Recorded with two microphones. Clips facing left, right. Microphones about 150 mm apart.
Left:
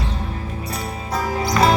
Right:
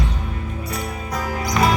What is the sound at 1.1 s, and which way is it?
Music, 30° left (ahead or behind).